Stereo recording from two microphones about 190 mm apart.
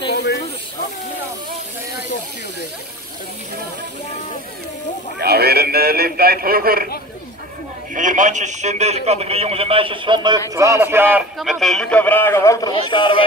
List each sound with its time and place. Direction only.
0.1 s snake: 60° left (ahead or behind)
5.2 s speech: 55° right (ahead or behind)
7.9 s a man's voice: 40° right (ahead or behind); by 11.2 s 10° right (ahead or behind)
11.3 s a man's voice: centre (ahead or behind); by 13.2 s 25° left (ahead or behind)